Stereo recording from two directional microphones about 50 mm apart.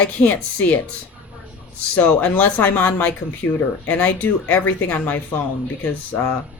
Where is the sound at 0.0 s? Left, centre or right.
Left.